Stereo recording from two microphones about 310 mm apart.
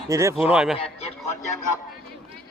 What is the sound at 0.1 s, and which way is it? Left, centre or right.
Speech, centre.